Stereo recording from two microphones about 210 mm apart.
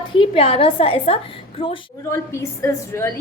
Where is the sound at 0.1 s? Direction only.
25° left (ahead or behind).